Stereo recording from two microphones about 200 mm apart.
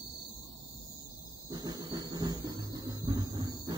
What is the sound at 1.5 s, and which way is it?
Music, 20° right (ahead or behind).